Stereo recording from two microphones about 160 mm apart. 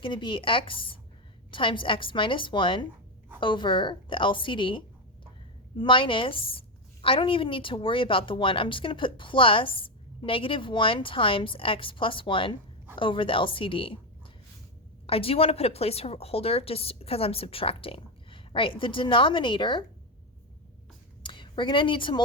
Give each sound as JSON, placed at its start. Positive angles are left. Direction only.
{"t": 0.0, "sound": "a woman's voice", "side_deg": 30}
{"t": 15.0, "sound": "a woman's voice", "side_deg": 35}
{"t": 21.2, "sound": "a woman's voice", "side_deg": 30}